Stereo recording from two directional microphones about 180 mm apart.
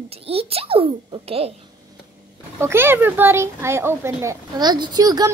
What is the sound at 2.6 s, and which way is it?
A woman's voice, 15° right (ahead or behind).